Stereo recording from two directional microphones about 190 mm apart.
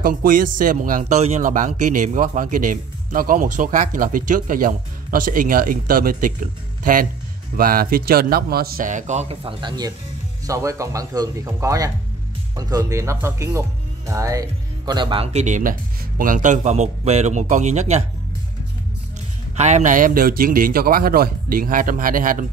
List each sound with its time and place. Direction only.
0.0 s a man's voice: 45° right (ahead or behind); by 15.2 s 25° right (ahead or behind)
15.3 s a man's voice: 40° right (ahead or behind)
19.5 s a man's voice: 35° right (ahead or behind)